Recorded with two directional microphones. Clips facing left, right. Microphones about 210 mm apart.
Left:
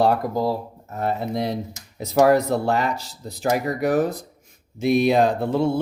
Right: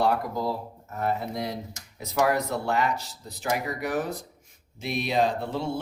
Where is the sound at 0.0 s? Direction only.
35° left (ahead or behind).